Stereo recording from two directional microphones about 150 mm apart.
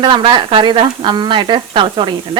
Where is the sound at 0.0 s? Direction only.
35° right (ahead or behind).